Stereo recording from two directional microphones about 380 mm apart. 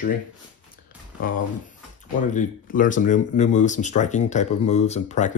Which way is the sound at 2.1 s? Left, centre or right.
Centre.